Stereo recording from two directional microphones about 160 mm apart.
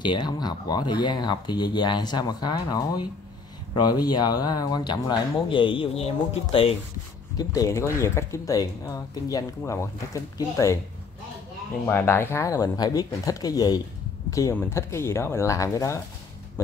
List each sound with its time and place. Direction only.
0.0 s speech: 30° left (ahead or behind)
7.3 s speech: 20° left (ahead or behind)
11.9 s speech: 15° left (ahead or behind)
14.5 s speech: 15° left (ahead or behind)